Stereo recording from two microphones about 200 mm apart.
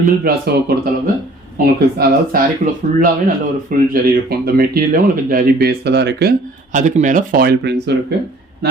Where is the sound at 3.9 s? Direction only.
50° right (ahead or behind).